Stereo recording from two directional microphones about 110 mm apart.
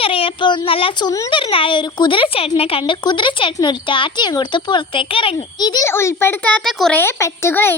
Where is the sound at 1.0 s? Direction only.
30° left (ahead or behind).